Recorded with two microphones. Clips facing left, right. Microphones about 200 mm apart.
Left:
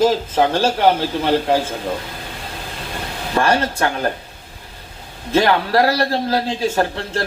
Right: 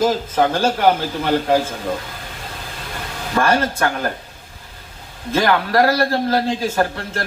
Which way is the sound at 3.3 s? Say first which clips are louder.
Even; 30° left (ahead or behind).